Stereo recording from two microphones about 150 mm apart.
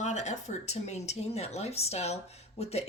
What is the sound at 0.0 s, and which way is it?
Speech, 50° left (ahead or behind).